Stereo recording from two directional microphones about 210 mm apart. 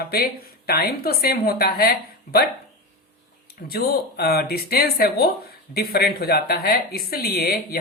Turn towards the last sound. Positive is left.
turn(degrees=50)  # may be behind; listen again after turning